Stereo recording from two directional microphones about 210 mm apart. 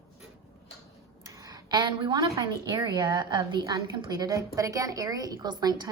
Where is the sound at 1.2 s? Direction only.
15° right (ahead or behind).